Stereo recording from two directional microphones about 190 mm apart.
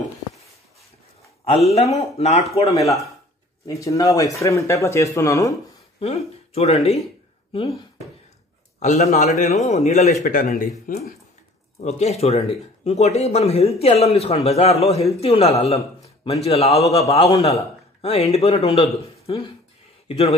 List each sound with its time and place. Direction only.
1.7 s speech: 35° left (ahead or behind)
3.6 s speech: 20° left (ahead or behind)
5.9 s speech: 30° left (ahead or behind)
8.7 s speech: 40° left (ahead or behind)
10.2 s speech: 45° left (ahead or behind)
11.8 s speech: 35° left (ahead or behind)